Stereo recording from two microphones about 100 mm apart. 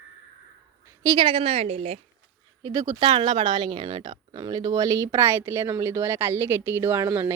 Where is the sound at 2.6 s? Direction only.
35° right (ahead or behind).